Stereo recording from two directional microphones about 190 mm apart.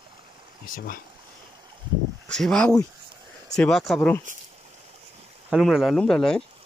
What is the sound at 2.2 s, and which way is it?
Speech, 5° left (ahead or behind).